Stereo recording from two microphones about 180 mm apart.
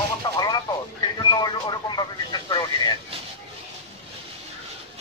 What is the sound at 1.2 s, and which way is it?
Vehicle, 25° left (ahead or behind).